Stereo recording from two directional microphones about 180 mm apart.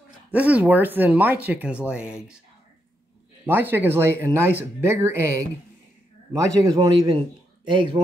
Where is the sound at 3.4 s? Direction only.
10° right (ahead or behind).